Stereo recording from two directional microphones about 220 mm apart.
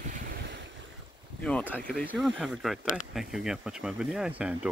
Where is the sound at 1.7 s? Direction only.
5° left (ahead or behind).